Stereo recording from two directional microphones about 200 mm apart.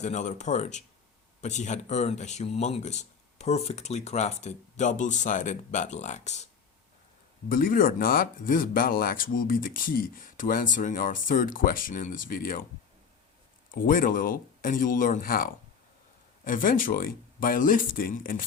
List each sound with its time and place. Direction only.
0.0 s speech: 35° left (ahead or behind)
7.5 s speech: 45° left (ahead or behind)
13.7 s speech: 45° left (ahead or behind)